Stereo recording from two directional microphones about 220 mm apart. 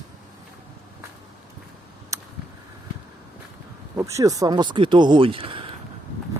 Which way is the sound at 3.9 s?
15° right (ahead or behind).